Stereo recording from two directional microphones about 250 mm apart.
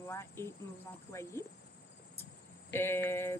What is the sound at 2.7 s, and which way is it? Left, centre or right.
Speech, centre.